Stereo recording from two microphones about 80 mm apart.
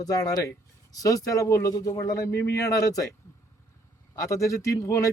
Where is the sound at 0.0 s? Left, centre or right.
Left.